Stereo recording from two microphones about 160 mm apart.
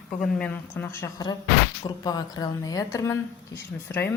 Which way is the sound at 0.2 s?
5° left (ahead or behind).